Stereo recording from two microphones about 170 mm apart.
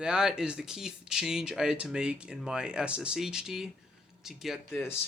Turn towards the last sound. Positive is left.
turn(degrees=15)  # may be behind; listen again after turning